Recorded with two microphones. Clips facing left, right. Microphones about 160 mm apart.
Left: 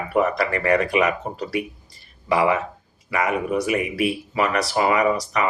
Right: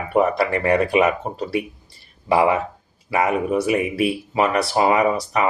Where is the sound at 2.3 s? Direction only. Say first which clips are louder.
Right 2 dB; 30° right (ahead or behind).